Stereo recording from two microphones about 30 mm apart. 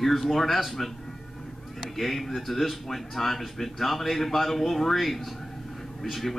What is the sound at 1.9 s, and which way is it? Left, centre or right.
Speech, centre.